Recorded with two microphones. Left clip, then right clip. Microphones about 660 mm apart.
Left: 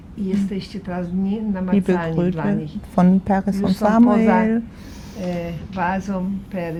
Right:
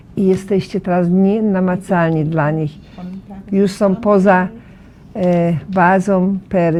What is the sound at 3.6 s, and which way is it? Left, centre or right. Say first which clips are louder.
Speech: right 3 dB; right.